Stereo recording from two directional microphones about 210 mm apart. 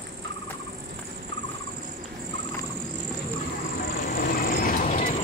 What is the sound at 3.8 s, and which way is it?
Vehicle, 45° left (ahead or behind).